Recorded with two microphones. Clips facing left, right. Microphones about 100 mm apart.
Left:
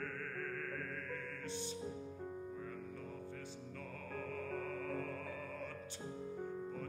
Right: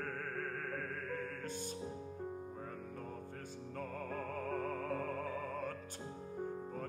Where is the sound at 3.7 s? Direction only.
45° right (ahead or behind).